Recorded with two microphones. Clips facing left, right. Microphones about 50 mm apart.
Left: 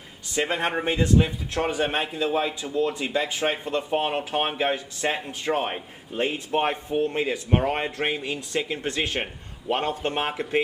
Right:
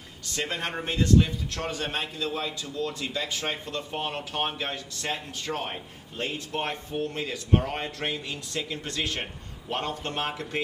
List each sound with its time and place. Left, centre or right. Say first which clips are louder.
0.3 s a man's voice: left 6 dB; centre